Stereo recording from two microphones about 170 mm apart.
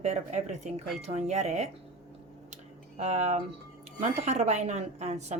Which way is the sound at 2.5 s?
40° right (ahead or behind).